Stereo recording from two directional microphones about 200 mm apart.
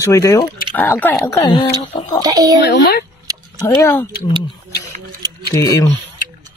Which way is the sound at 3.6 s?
15° left (ahead or behind).